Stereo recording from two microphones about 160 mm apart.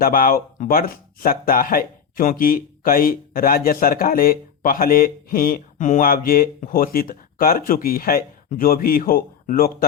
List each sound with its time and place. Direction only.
0.0 s speech: 65° left (ahead or behind)